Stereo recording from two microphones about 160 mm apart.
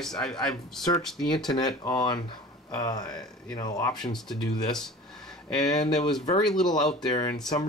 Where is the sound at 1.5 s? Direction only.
25° left (ahead or behind).